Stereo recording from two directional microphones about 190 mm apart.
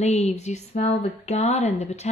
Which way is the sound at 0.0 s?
35° left (ahead or behind).